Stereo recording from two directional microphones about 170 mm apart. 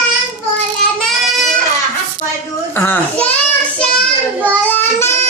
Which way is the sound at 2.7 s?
10° left (ahead or behind).